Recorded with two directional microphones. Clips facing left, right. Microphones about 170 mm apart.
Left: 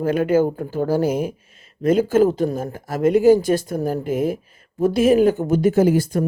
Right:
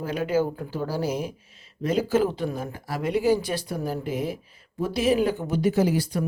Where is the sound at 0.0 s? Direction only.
50° left (ahead or behind).